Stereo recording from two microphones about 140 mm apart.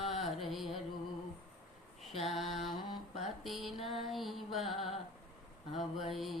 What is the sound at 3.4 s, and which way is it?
Music, centre (ahead or behind).